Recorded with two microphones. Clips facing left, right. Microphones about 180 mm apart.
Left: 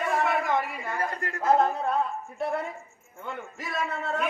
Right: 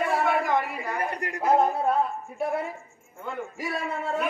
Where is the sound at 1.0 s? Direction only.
15° right (ahead or behind).